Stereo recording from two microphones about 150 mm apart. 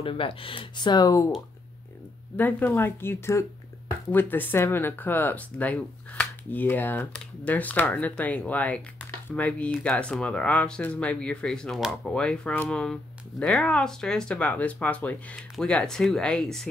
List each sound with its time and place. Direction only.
0.0 s speech: 35° left (ahead or behind)
2.3 s speech: 10° left (ahead or behind)